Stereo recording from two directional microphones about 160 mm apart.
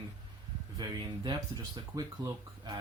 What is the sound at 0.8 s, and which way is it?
Speech, 25° right (ahead or behind).